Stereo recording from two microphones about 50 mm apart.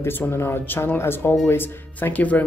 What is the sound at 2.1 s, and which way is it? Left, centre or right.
Speech, left.